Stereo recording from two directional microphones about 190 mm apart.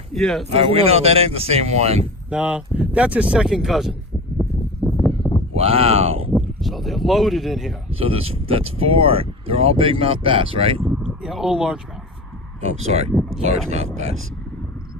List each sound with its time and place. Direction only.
0.1 s speech: centre (ahead or behind)
0.5 s speech: 30° right (ahead or behind)
2.3 s speech: 5° right (ahead or behind)
4.8 s a sound: 5° left (ahead or behind)
5.5 s speech: 30° right (ahead or behind)
6.3 s a sound: centre (ahead or behind)
7.9 s speech: 30° right (ahead or behind)
10.8 s a sound: centre (ahead or behind)
13.1 s speech: centre (ahead or behind)
13.4 s speech: 35° right (ahead or behind)